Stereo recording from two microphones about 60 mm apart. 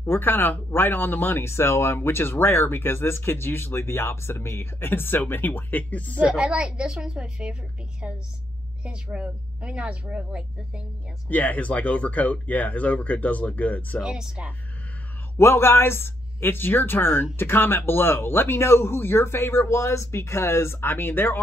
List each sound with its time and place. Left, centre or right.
0.0 s speech: left
6.2 s speech: centre
8.8 s speech: centre
11.2 s speech: left
14.0 s speech: centre
15.3 s speech: left